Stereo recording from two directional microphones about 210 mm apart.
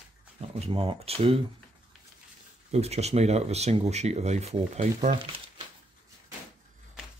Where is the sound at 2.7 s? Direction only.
30° right (ahead or behind).